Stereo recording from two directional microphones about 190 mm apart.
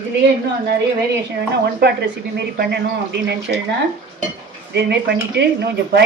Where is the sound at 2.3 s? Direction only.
60° right (ahead or behind).